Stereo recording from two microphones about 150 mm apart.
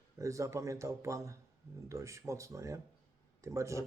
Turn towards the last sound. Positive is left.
turn(degrees=-20)  # may be behind; listen again after turning